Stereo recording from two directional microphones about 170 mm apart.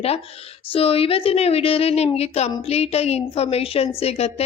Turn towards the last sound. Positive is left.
turn(degrees=35)  # may be behind; listen again after turning